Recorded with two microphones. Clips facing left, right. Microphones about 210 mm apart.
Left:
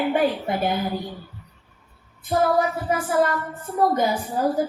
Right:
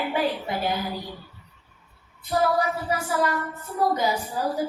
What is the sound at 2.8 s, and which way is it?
Speech, 50° left (ahead or behind).